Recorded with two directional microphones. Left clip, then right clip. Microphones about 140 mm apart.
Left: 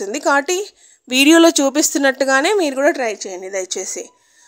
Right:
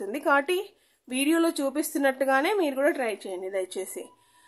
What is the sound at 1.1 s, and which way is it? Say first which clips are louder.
A woman's voice: left 14 dB; 85° left.